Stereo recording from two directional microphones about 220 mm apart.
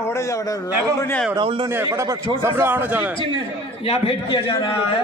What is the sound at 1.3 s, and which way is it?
A man's voice, 25° right (ahead or behind).